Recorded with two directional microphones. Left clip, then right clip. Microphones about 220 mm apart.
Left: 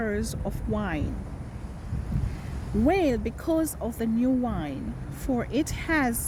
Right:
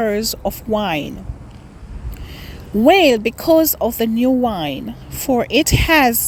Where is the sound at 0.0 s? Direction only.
25° right (ahead or behind).